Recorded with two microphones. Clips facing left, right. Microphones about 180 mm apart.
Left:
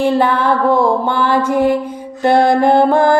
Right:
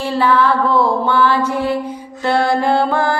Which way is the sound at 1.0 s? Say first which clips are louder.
Even; 50° left (ahead or behind).